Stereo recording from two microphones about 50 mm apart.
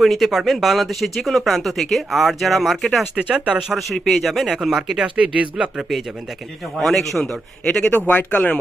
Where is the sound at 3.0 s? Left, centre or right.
Centre.